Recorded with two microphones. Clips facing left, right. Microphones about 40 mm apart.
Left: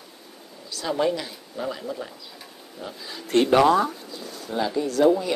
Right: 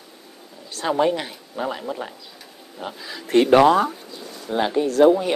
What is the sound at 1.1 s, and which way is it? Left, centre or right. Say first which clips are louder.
A man's voice: right 3 dB; right.